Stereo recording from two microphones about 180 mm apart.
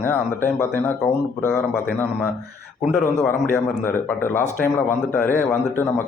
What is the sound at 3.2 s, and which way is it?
A man's voice, 10° left (ahead or behind).